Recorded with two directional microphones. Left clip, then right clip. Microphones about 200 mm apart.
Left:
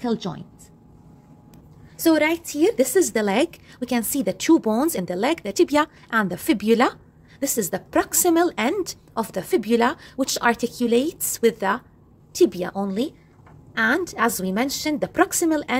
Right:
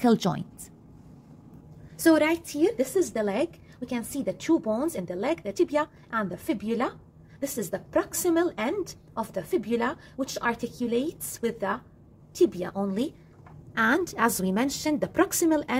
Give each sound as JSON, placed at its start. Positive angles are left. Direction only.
{"t": 0.0, "sound": "a woman's voice", "side_deg": -35}
{"t": 2.0, "sound": "a woman's voice", "side_deg": 5}
{"t": 2.8, "sound": "a woman's voice", "side_deg": 40}
{"t": 13.7, "sound": "a woman's voice", "side_deg": 5}